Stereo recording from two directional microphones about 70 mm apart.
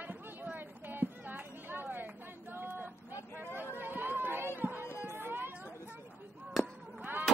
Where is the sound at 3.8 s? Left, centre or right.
Right.